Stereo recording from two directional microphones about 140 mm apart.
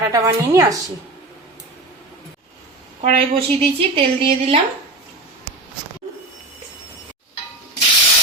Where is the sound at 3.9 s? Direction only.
40° right (ahead or behind).